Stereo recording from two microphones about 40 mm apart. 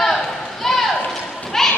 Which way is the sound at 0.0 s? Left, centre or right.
Centre.